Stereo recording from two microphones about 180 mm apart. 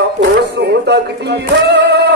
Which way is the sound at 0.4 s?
65° right (ahead or behind).